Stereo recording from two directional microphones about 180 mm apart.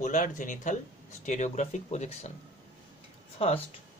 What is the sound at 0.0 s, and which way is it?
Speech, 45° left (ahead or behind).